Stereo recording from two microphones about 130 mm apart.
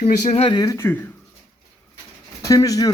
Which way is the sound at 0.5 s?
25° left (ahead or behind).